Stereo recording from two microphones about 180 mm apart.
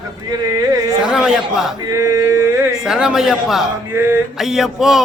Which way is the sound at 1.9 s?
20° right (ahead or behind).